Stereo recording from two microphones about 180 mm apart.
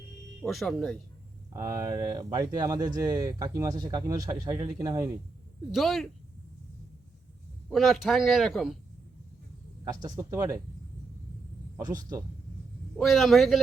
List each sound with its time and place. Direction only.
0.4 s speech: centre (ahead or behind)
1.5 s speech: 20° right (ahead or behind)
5.7 s speech: centre (ahead or behind)
7.7 s speech: centre (ahead or behind)
9.8 s speech: 20° right (ahead or behind)
13.0 s speech: centre (ahead or behind)